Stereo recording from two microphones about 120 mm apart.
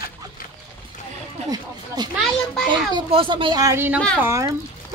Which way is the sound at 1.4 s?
35° right (ahead or behind).